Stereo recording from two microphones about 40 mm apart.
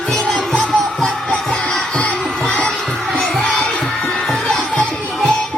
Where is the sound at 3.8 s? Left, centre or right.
Centre.